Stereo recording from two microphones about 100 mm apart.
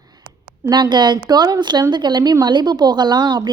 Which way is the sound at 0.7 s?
45° right (ahead or behind).